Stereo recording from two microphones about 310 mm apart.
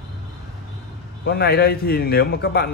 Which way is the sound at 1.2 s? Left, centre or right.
Left.